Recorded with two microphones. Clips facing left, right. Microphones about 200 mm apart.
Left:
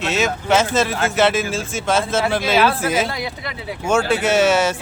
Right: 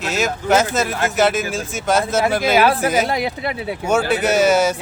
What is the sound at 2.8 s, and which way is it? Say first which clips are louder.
Speech: right 2 dB; 50° right (ahead or behind).